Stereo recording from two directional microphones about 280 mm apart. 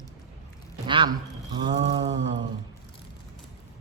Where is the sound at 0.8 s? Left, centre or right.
Centre.